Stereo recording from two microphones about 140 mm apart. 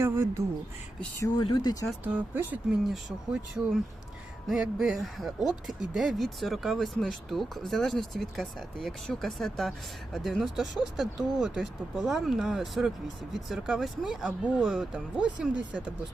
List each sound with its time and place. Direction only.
0.0 s speech: 20° right (ahead or behind)
1.4 s speech: 35° left (ahead or behind)
1.9 s speech: 10° right (ahead or behind)
2.9 s speech: 5° right (ahead or behind)